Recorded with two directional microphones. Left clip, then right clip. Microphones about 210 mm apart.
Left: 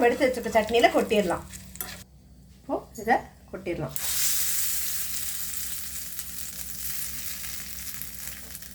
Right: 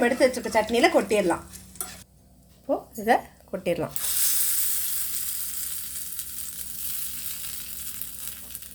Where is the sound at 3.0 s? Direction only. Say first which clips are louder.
Right 2 dB; 50° right (ahead or behind).